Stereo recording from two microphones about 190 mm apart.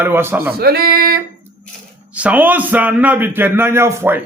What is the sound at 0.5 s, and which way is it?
Speech, 55° right (ahead or behind).